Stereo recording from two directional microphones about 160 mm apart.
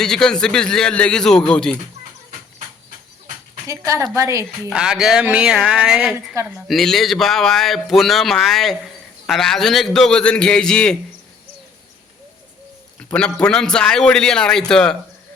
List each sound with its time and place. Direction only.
0.0 s speech: 5° left (ahead or behind)
3.7 s a woman's voice: 20° right (ahead or behind)
4.7 s speech: 5° right (ahead or behind)
13.0 s speech: 5° left (ahead or behind)